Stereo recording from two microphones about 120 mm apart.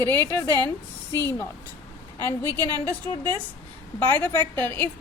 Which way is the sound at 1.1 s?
20° left (ahead or behind).